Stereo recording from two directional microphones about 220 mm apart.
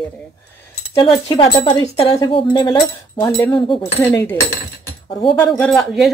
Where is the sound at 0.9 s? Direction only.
20° left (ahead or behind).